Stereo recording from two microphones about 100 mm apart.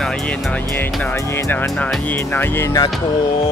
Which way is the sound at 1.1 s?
30° left (ahead or behind).